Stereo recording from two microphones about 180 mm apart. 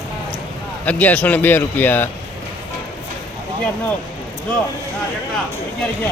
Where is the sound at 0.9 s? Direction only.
10° left (ahead or behind).